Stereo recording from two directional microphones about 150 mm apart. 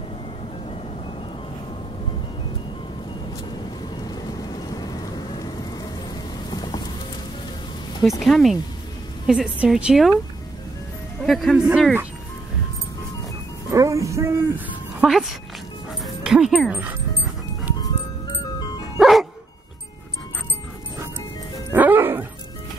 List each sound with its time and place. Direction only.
4.0 s vehicle: 25° left (ahead or behind)
6.5 s horse: 30° left (ahead or behind)
8.2 s a woman's voice: centre (ahead or behind)
11.2 s a woman's voice: centre (ahead or behind)
13.7 s music: 20° right (ahead or behind)
15.0 s speech: centre (ahead or behind)
18.9 s music: centre (ahead or behind)
21.7 s music: 10° right (ahead or behind)